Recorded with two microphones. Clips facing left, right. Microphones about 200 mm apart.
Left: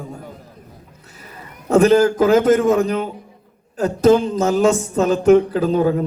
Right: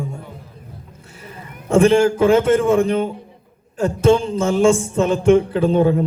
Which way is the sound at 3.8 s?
30° right (ahead or behind).